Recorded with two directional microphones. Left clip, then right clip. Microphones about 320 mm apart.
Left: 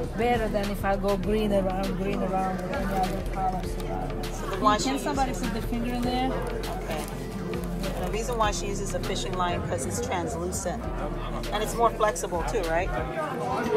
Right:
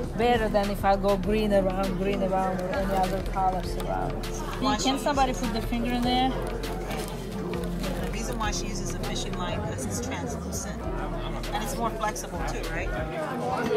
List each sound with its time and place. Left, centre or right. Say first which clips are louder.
0.2 s speech: right 2 dB; centre
4.6 s speech: left 1 dB; centre
11.5 s speech: left 6 dB; centre